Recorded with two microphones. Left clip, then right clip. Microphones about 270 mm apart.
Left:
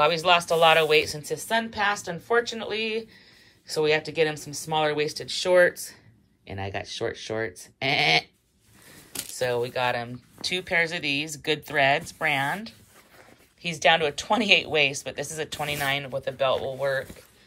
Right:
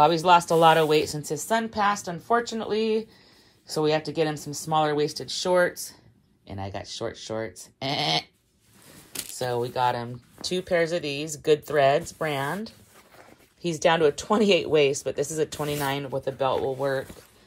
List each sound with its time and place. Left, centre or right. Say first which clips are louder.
0.0 s speech: right 2 dB; centre
9.1 s a sound: even; centre
9.4 s speech: even; centre
13.2 s speech: right 1 dB; centre